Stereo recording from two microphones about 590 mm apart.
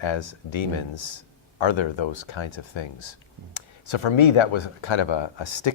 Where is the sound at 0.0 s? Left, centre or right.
Left.